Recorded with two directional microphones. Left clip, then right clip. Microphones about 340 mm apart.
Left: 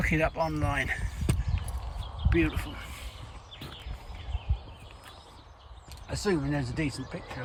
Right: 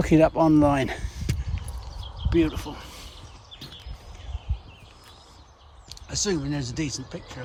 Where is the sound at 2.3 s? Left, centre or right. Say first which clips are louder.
Right 5 dB; centre.